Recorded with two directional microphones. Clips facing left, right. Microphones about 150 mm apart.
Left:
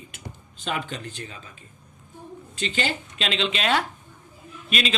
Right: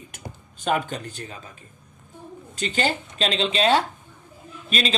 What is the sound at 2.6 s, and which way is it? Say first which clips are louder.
Speech: right 3 dB; 40° right (ahead or behind).